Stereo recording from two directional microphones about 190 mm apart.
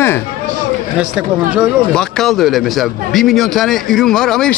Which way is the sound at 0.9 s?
5° right (ahead or behind).